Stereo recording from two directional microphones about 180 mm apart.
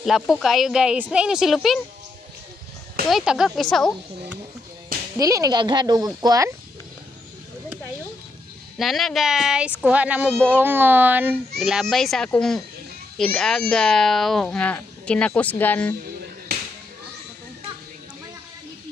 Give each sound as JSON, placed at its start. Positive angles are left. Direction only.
{"t": 0.0, "sound": "a child's voice", "side_deg": 0}
{"t": 3.1, "sound": "a child's voice", "side_deg": 0}
{"t": 5.1, "sound": "speech", "side_deg": -20}
{"t": 8.7, "sound": "a child's voice", "side_deg": 0}